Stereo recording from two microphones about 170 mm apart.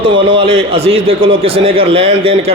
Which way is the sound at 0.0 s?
30° right (ahead or behind).